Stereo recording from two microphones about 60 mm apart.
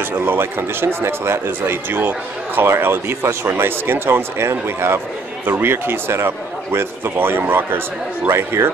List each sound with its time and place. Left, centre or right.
0.2 s speech: right